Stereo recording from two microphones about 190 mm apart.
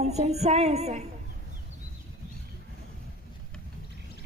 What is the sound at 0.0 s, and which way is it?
A woman's voice, 35° right (ahead or behind).